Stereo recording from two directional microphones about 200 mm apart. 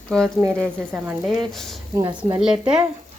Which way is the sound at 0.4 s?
15° right (ahead or behind).